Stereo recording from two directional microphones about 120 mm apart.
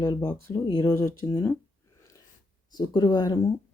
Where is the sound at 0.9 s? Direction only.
25° left (ahead or behind).